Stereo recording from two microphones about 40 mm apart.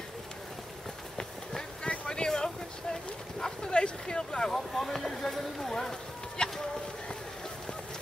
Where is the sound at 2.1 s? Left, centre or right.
Centre.